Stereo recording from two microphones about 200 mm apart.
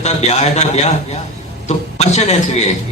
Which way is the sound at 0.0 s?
35° left (ahead or behind).